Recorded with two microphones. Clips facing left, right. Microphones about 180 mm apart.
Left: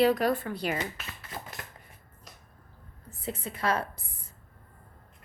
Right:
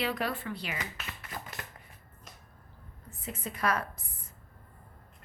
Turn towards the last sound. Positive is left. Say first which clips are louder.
# left 2 dB
turn(degrees=30)  # may be behind; listen again after turning